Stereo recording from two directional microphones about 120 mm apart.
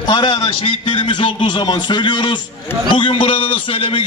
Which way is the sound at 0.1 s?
40° left (ahead or behind).